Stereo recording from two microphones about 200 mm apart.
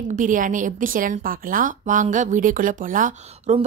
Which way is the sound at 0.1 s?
40° right (ahead or behind).